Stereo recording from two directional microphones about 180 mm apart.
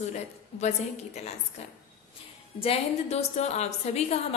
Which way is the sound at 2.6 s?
35° left (ahead or behind).